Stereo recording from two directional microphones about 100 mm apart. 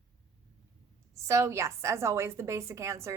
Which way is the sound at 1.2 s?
30° right (ahead or behind).